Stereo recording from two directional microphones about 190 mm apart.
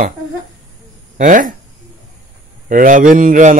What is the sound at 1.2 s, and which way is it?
Speech, 45° right (ahead or behind).